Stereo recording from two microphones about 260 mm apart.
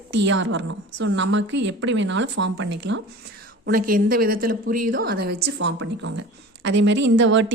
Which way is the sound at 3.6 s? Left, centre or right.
Right.